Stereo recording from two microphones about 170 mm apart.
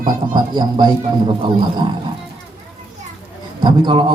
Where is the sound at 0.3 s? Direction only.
25° right (ahead or behind).